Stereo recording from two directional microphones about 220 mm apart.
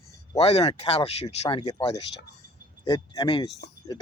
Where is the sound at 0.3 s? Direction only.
30° left (ahead or behind).